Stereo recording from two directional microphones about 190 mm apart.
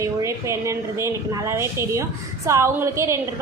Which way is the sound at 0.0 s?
15° right (ahead or behind).